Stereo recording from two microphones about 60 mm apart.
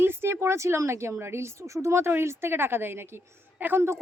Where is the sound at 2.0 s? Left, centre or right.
Right.